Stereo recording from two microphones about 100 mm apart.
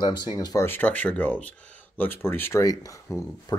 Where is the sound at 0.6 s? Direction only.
20° left (ahead or behind).